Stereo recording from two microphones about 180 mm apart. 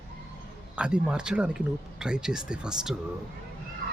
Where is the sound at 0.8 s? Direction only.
5° right (ahead or behind).